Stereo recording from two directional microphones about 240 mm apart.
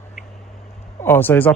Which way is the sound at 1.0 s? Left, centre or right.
Centre.